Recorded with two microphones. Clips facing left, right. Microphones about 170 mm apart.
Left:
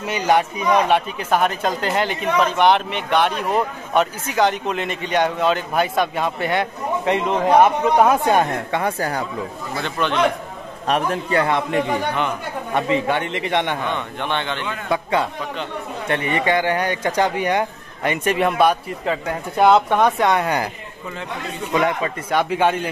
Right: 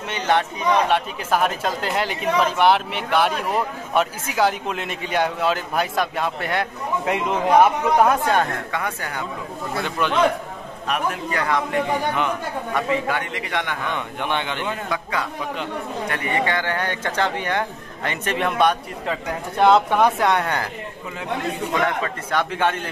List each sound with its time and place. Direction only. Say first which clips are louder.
0.1 s speech: left 3 dB; 10° left (ahead or behind)
8.1 s speech: left 3 dB; 15° left (ahead or behind)
8.7 s speech: left 8 dB; 35° left (ahead or behind)
9.8 s a man's voice: left 1 dB; 5° right (ahead or behind)
10.9 s a man's voice: left 4 dB; 30° left (ahead or behind)
13.9 s a man's voice: left 1 dB; 10° right (ahead or behind)
14.9 s a man's voice: left 5 dB; 25° left (ahead or behind); by 20.4 s centre (ahead or behind)
20.4 s speech: left 4 dB; 10° left (ahead or behind)
21.7 s speech: left 5 dB; 15° left (ahead or behind)